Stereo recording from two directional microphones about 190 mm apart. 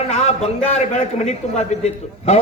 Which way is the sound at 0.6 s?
35° left (ahead or behind).